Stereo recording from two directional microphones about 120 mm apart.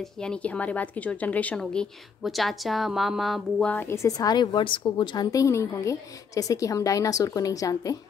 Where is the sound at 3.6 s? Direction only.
20° left (ahead or behind).